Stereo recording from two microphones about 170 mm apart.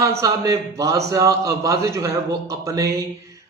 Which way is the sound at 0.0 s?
20° right (ahead or behind).